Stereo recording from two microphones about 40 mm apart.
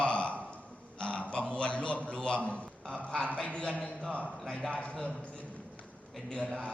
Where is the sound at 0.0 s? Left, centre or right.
Left.